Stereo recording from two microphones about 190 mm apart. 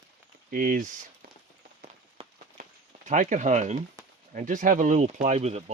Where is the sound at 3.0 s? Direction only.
40° right (ahead or behind).